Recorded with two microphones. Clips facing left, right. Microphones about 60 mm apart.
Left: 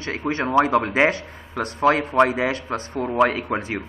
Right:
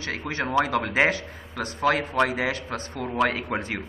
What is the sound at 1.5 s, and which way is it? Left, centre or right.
Speech, left.